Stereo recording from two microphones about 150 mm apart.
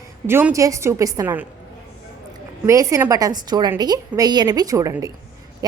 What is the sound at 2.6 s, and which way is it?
A woman's voice, 20° right (ahead or behind).